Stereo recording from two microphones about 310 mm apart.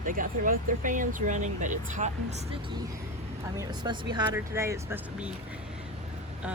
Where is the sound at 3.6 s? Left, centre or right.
Centre.